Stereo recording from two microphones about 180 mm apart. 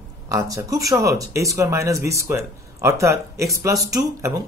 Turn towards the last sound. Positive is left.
turn(degrees=-20)  # may be behind; listen again after turning